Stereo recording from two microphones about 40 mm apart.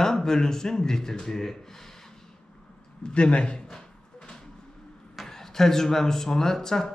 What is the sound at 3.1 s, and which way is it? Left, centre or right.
Speech, left.